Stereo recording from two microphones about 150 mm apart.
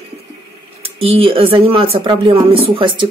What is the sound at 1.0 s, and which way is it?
Speech, 40° right (ahead or behind).